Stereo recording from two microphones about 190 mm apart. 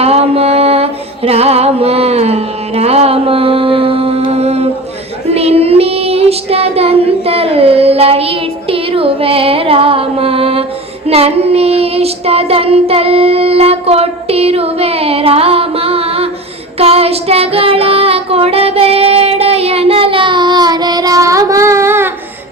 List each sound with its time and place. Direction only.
0.0 s music: 30° right (ahead or behind)
5.3 s child singing: 35° right (ahead or behind); by 22.1 s 10° right (ahead or behind)